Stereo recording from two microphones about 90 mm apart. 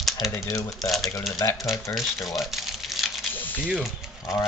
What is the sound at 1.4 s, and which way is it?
Speech, 30° left (ahead or behind).